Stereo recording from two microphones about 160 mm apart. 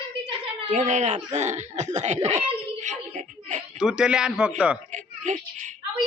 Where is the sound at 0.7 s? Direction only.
45° right (ahead or behind).